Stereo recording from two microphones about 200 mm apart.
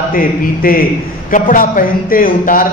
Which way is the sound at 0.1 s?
45° left (ahead or behind).